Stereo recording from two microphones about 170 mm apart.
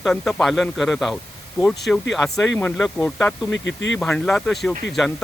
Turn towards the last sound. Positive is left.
turn(degrees=0)  # may be behind; listen again after turning